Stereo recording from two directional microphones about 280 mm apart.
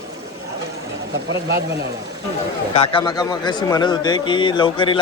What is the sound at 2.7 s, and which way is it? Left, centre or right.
Speech, centre.